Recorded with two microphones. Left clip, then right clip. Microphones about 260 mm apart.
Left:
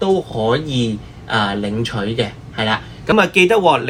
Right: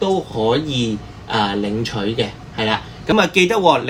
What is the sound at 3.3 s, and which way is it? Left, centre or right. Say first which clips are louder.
Speech: left 1 dB; centre.